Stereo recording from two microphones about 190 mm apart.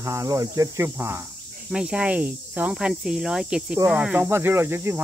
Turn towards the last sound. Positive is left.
turn(degrees=-10)  # may be behind; listen again after turning